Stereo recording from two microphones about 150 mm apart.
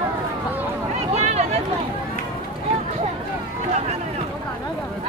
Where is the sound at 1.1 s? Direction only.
45° right (ahead or behind).